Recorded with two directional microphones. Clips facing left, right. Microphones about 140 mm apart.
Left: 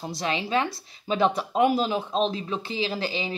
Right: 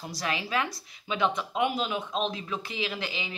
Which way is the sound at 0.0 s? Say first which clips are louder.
Left 4 dB; 25° left (ahead or behind).